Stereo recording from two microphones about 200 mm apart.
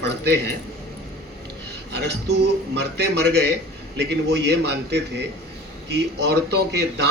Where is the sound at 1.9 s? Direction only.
60° right (ahead or behind).